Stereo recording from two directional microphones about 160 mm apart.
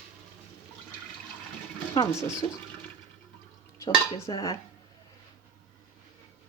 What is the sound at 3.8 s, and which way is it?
Speech, 30° left (ahead or behind).